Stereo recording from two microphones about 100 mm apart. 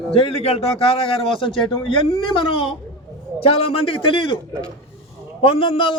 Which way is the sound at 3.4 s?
70° left (ahead or behind).